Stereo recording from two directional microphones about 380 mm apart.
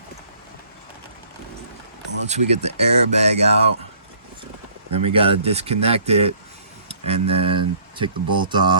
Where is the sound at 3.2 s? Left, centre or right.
Centre.